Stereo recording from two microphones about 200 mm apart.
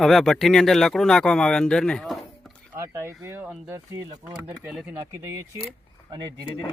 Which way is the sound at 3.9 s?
20° right (ahead or behind).